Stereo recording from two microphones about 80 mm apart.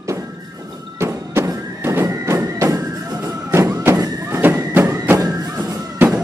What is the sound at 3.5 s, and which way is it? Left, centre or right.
Thunk, right.